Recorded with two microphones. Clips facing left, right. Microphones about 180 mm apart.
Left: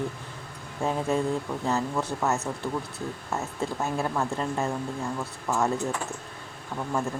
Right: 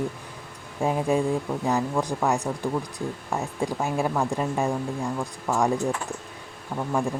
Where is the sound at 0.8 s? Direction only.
15° right (ahead or behind).